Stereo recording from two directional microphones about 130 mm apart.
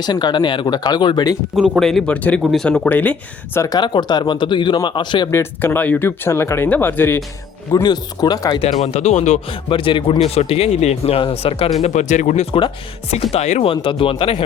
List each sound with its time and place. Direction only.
0.0 s speech: 35° left (ahead or behind)
1.5 s speech: 5° right (ahead or behind); by 3.7 s 15° left (ahead or behind)
3.7 s speech: 35° left (ahead or behind)
5.3 s speech: 20° left (ahead or behind)
7.7 s speech: 30° left (ahead or behind)
8.6 s speech: 55° left (ahead or behind)
9.5 s speech: 45° left (ahead or behind)
11.8 s speech: 65° left (ahead or behind); by 14.4 s 45° left (ahead or behind)